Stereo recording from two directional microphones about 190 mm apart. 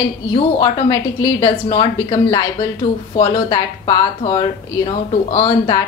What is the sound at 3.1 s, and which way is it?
Speech, 25° left (ahead or behind).